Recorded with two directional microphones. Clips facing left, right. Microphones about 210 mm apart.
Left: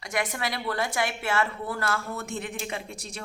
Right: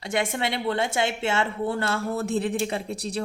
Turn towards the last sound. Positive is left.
turn(degrees=-35)  # may be behind; listen again after turning